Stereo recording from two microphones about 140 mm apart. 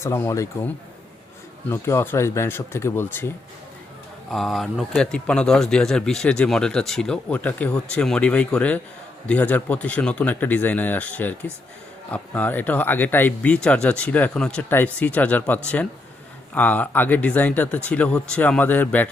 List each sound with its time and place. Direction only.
0.0 s speech: 20° left (ahead or behind)
1.7 s speech: 20° left (ahead or behind)
4.3 s speech: centre (ahead or behind)